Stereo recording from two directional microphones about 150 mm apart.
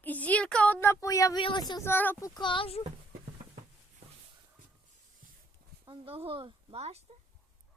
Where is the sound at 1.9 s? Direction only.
15° left (ahead or behind); by 2.8 s 35° left (ahead or behind).